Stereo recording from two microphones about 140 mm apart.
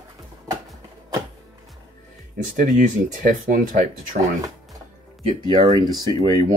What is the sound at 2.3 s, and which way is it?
Speech, 70° right (ahead or behind).